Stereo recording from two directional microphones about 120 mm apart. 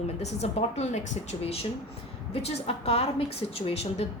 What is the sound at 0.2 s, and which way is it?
A woman's voice, 65° left (ahead or behind).